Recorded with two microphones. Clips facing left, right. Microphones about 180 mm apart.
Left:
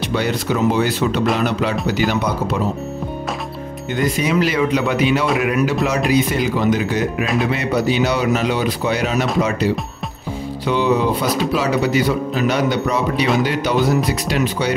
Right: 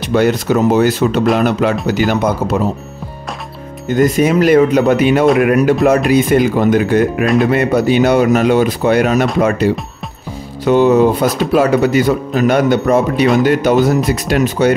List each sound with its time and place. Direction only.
0.0 s speech: 45° right (ahead or behind)
3.9 s speech: 50° right (ahead or behind)